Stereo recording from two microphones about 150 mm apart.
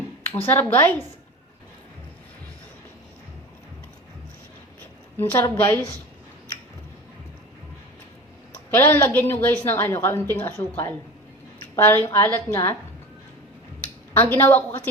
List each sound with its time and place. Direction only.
0.4 s a woman's voice: 15° left (ahead or behind)
5.1 s a woman's voice: 15° left (ahead or behind)
8.5 s a woman's voice: 15° left (ahead or behind)
11.6 s a woman's voice: 15° left (ahead or behind)
14.1 s a woman's voice: 15° left (ahead or behind)